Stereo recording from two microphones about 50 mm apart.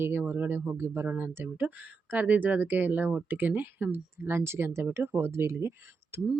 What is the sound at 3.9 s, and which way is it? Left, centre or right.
Speech, right.